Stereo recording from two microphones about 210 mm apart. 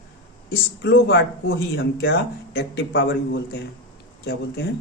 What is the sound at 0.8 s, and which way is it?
A man's voice, 55° left (ahead or behind).